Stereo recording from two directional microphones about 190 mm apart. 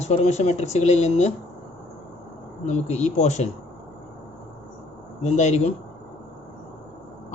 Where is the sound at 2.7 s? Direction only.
35° left (ahead or behind).